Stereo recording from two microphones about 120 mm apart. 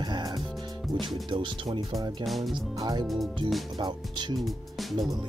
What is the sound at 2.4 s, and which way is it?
Speech, 30° right (ahead or behind).